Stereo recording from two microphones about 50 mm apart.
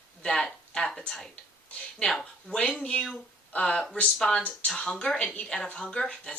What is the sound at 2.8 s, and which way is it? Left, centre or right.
A woman's voice, left.